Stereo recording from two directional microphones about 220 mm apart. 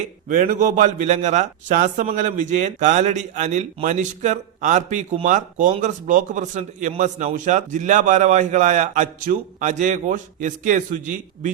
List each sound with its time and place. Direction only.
0.0 s speech: 35° right (ahead or behind)